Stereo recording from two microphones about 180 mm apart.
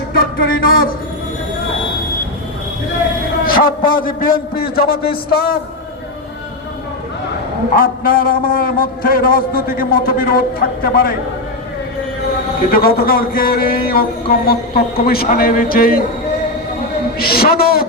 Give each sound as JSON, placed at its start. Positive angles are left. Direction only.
{"t": 0.2, "sound": "speech", "side_deg": 55}
{"t": 3.4, "sound": "speech", "side_deg": 55}
{"t": 7.8, "sound": "speech", "side_deg": 55}
{"t": 12.7, "sound": "speech", "side_deg": 55}
{"t": 17.2, "sound": "a man's voice", "side_deg": 55}